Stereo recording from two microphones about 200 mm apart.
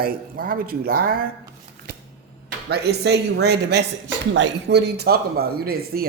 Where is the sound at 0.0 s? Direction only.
45° right (ahead or behind).